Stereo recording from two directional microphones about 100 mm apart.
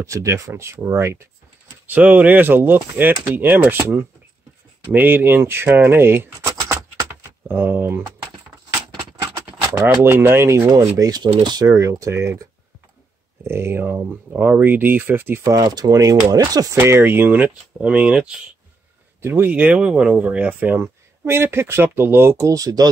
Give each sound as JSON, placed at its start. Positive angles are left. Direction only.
{"t": 0.0, "sound": "speech", "side_deg": -30}
{"t": 1.9, "sound": "speech", "side_deg": -15}
{"t": 10.0, "sound": "speech", "side_deg": -25}
{"t": 11.0, "sound": "speech", "side_deg": -40}
{"t": 15.4, "sound": "speech", "side_deg": -40}
{"t": 16.7, "sound": "speech", "side_deg": -25}
{"t": 19.2, "sound": "speech", "side_deg": -20}